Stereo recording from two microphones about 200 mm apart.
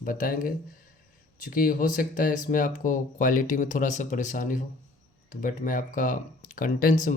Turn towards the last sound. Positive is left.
turn(degrees=40)  # may be behind; listen again after turning